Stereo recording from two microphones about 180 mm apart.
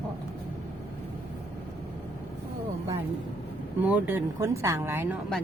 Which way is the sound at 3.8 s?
10° right (ahead or behind).